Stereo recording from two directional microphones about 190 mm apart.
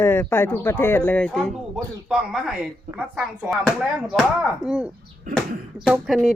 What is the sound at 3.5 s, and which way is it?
Speech, centre (ahead or behind).